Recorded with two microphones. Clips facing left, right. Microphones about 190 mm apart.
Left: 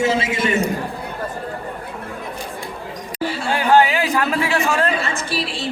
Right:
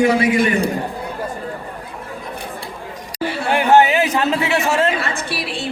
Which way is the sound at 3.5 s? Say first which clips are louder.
Right 2 dB; 20° right (ahead or behind).